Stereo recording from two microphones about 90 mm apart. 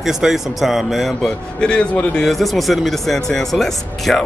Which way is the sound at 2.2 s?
Centre (ahead or behind).